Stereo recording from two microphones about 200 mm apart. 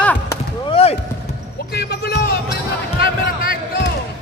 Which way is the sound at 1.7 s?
50° left (ahead or behind).